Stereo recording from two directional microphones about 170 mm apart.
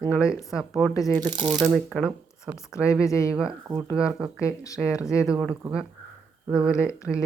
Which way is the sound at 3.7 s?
20° right (ahead or behind).